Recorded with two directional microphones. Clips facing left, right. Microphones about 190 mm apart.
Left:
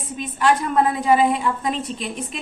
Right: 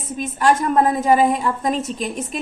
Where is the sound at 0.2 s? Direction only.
45° right (ahead or behind).